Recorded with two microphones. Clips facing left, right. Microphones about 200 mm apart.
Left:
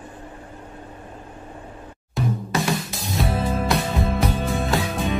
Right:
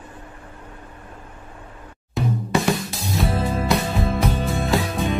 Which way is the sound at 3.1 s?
Centre (ahead or behind).